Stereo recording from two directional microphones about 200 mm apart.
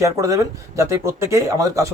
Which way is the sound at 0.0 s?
15° right (ahead or behind).